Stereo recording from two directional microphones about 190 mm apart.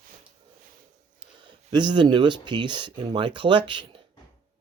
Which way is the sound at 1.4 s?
25° right (ahead or behind).